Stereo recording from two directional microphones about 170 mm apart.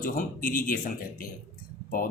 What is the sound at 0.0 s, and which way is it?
A man's voice, 55° left (ahead or behind).